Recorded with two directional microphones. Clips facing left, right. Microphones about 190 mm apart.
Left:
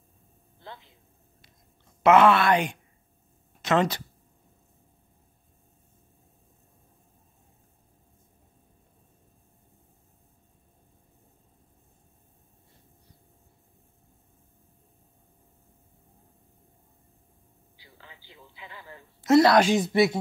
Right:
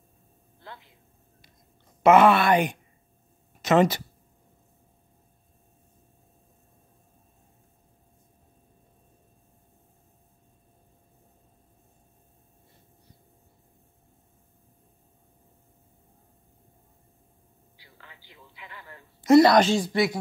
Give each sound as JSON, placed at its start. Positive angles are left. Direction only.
{"t": 0.7, "sound": "a man's voice", "side_deg": 25}
{"t": 2.0, "sound": "speech", "side_deg": -5}
{"t": 17.8, "sound": "a sound", "side_deg": 25}
{"t": 19.2, "sound": "speech", "side_deg": 0}
{"t": 19.7, "sound": "speech", "side_deg": 20}